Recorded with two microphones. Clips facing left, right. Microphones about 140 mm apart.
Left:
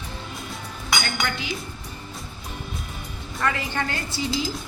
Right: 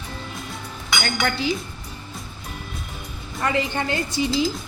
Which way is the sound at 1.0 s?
40° right (ahead or behind).